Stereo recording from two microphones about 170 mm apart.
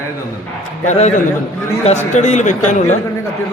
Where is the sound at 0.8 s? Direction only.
45° left (ahead or behind).